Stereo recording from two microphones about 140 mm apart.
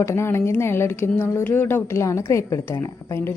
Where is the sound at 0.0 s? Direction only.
20° left (ahead or behind).